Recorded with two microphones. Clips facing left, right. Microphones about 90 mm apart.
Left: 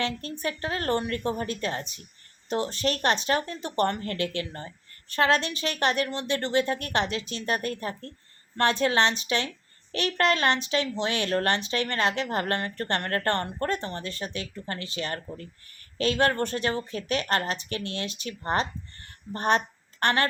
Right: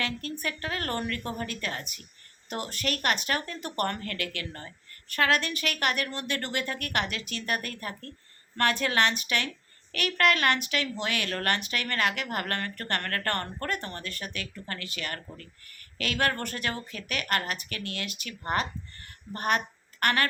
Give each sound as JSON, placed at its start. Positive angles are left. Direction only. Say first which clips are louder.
{"t": 0.0, "sound": "speech", "louder": "left 3 dB", "side_deg": 30}